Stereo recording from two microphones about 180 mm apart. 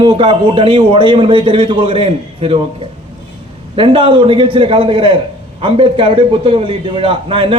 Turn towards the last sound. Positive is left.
turn(degrees=-30)  # may be behind; listen again after turning